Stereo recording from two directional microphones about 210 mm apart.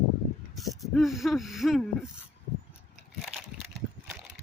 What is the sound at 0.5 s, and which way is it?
Speech, centre (ahead or behind).